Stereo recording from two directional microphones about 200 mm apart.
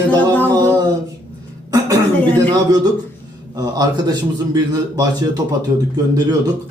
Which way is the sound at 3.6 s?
20° right (ahead or behind).